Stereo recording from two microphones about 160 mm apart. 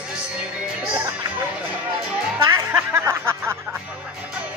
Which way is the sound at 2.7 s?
15° right (ahead or behind).